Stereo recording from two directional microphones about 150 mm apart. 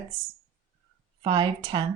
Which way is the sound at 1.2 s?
30° right (ahead or behind).